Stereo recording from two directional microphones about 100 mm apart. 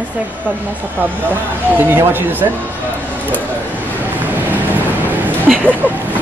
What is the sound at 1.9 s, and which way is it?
Speech, 20° right (ahead or behind).